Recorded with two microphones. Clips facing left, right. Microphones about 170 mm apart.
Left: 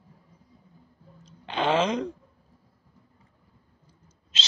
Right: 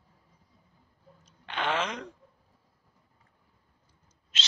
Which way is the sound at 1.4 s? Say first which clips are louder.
Left 7 dB; 30° left (ahead or behind).